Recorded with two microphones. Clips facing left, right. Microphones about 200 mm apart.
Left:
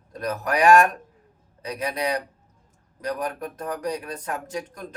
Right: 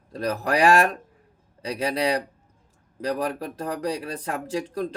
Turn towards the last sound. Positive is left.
turn(degrees=-30)  # may be behind; listen again after turning